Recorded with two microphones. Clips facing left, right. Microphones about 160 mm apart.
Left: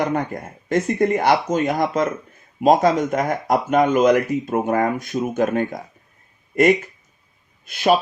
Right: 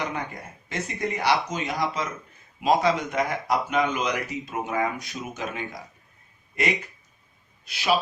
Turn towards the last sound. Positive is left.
turn(degrees=50)  # may be behind; listen again after turning